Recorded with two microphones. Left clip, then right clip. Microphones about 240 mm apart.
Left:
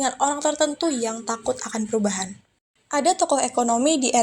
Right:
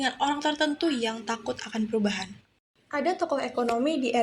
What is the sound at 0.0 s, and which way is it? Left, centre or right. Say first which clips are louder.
Speech: left 4 dB; left.